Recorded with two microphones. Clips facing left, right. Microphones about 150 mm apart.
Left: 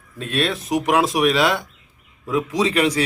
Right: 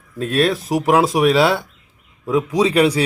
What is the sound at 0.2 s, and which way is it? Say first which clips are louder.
A man's voice: right 5 dB; 40° right (ahead or behind).